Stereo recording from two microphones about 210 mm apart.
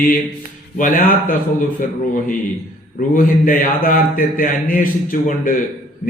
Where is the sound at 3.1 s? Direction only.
40° left (ahead or behind).